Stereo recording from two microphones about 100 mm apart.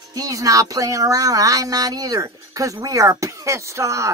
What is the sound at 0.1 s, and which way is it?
Speech, 35° right (ahead or behind).